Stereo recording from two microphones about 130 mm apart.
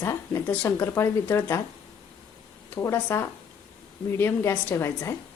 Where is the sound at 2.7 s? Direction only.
20° left (ahead or behind).